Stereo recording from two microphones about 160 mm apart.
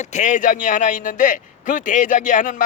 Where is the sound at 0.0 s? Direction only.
50° left (ahead or behind).